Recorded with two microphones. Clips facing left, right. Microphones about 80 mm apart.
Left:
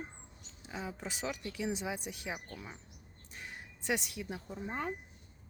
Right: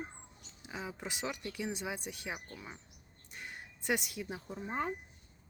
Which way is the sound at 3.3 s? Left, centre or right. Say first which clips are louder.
Even; centre.